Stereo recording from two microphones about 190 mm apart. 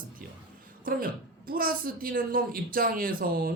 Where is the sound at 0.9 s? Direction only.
50° right (ahead or behind).